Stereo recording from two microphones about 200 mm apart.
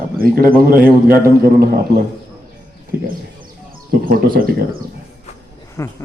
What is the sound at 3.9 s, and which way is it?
Speech, 45° right (ahead or behind).